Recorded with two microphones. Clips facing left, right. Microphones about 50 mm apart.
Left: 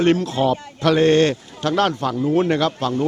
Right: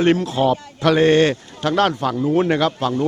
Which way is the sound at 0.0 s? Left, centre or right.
Centre.